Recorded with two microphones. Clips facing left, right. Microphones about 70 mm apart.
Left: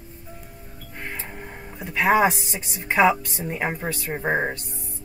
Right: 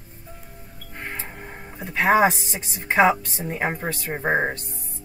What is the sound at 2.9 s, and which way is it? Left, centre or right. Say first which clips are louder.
Speech: right 1 dB; right.